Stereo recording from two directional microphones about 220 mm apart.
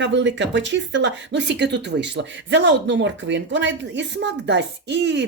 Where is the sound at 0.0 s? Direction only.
55° right (ahead or behind).